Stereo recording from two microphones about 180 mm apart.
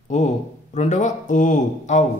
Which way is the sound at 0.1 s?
40° left (ahead or behind).